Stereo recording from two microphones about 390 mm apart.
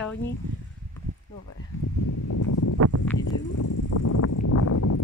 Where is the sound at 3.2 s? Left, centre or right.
Left.